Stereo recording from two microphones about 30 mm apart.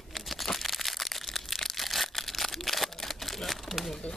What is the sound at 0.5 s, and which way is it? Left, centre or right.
Crushing, centre.